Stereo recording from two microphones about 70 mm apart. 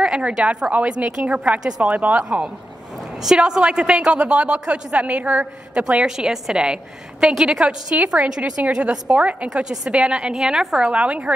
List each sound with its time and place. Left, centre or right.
0.0 s a woman's voice: centre
3.3 s a woman's voice: centre